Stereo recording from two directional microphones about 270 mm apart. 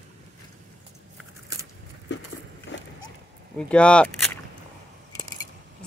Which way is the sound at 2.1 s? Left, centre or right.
Left.